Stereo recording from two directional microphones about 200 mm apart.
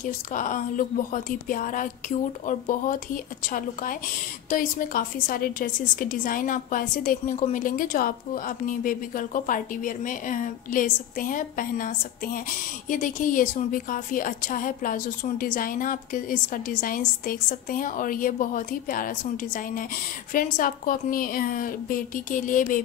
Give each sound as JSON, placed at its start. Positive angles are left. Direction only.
{"t": 0.0, "sound": "a woman's voice", "side_deg": 40}